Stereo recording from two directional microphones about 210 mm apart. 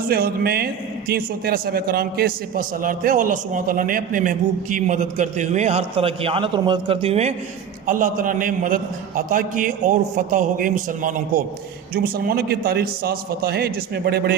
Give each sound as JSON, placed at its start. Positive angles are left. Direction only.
{"t": 0.1, "sound": "a man's voice", "side_deg": -45}